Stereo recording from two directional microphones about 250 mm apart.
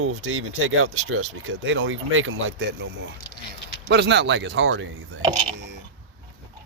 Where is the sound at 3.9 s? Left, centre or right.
Right.